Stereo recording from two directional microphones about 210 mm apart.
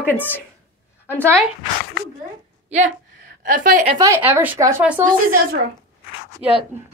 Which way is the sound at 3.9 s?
15° right (ahead or behind).